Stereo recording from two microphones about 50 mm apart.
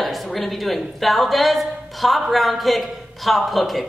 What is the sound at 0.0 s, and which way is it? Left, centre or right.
Speech, centre.